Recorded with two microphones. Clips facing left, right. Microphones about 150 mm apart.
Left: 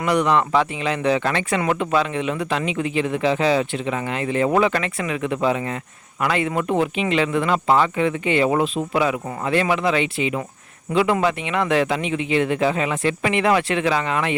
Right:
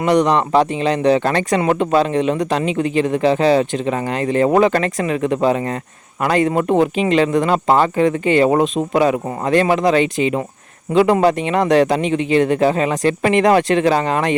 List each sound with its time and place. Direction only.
0.0 s speech: 35° right (ahead or behind)